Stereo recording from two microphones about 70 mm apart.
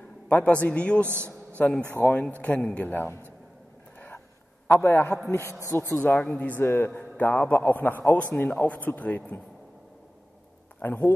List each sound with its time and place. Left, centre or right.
0.3 s a man's voice: left
1.0 s a man's voice: right
2.0 s a man's voice: left
4.7 s a man's voice: left
5.8 s a man's voice: left
6.6 s a man's voice: left
10.8 s a man's voice: left